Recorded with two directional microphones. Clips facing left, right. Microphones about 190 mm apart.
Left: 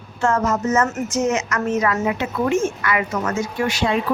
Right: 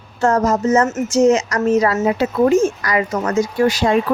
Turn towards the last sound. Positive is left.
turn(degrees=-40)  # may be behind; listen again after turning